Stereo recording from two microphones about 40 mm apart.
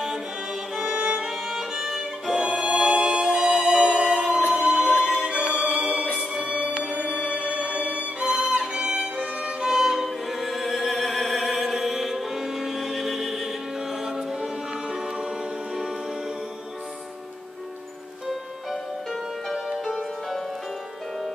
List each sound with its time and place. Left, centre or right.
1.0 s music: centre
2.8 s music: right
9.1 s violin: right
9.6 s music: centre
10.0 s music: centre
19.5 s music: centre